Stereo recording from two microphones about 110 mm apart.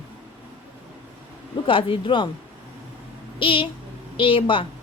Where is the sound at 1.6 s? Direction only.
50° left (ahead or behind).